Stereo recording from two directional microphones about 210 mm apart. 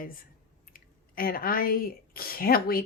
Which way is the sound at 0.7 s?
45° left (ahead or behind).